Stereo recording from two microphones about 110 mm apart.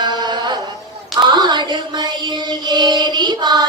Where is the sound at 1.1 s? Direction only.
40° right (ahead or behind).